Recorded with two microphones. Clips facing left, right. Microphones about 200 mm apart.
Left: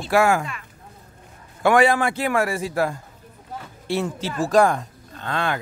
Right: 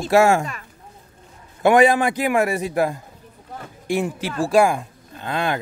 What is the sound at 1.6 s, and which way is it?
A man's voice, 20° right (ahead or behind).